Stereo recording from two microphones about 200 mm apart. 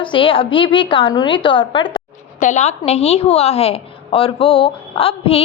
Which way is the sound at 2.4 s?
35° left (ahead or behind).